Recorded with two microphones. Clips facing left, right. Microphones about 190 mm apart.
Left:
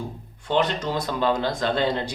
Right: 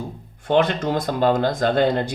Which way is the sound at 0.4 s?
55° right (ahead or behind).